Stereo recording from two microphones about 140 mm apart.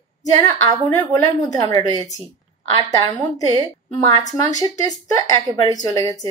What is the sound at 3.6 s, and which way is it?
A woman's voice, 25° left (ahead or behind).